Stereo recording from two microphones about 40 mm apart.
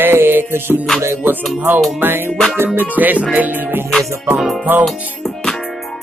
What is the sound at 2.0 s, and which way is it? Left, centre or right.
Music, right.